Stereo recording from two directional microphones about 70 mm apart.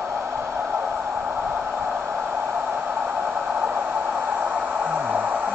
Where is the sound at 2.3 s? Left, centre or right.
Right.